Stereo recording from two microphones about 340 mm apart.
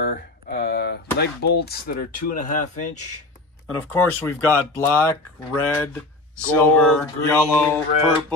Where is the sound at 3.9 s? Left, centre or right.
Centre.